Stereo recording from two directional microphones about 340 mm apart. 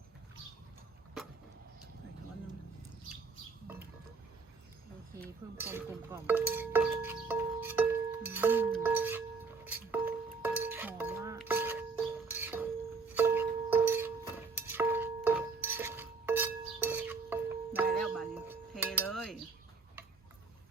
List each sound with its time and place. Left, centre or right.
5.5 s a sound: centre
9.7 s music: centre
14.5 s glass: centre